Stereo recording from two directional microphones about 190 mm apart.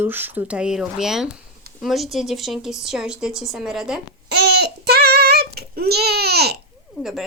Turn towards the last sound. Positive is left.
turn(degrees=-55)  # may be behind; listen again after turning